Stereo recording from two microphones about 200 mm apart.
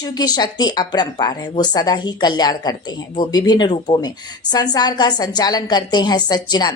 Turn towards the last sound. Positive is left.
turn(degrees=20)  # may be behind; listen again after turning